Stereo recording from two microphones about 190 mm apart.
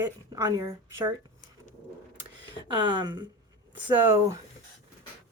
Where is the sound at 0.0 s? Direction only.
20° right (ahead or behind).